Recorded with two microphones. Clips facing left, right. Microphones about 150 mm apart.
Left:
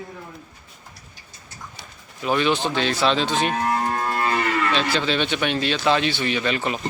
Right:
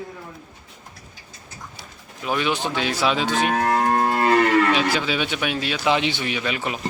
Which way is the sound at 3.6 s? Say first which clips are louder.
Right 4 dB; 65° right (ahead or behind).